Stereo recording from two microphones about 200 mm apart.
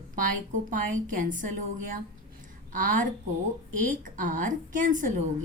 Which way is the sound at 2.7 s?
40° right (ahead or behind).